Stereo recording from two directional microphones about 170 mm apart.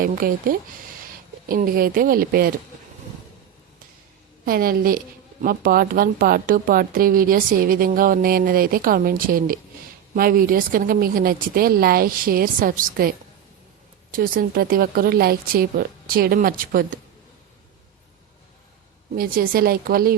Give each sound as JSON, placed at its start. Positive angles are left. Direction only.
{"t": 0.0, "sound": "a woman's voice", "side_deg": -55}
{"t": 4.4, "sound": "a woman's voice", "side_deg": -60}
{"t": 19.1, "sound": "a woman's voice", "side_deg": -60}